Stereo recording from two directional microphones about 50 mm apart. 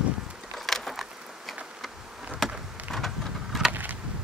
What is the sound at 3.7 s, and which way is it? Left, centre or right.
Vehicle, right.